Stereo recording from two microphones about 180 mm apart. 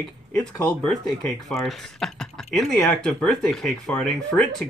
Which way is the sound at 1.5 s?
Centre (ahead or behind).